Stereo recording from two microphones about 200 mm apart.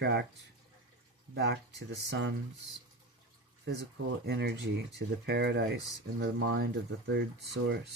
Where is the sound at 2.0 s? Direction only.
60° right (ahead or behind).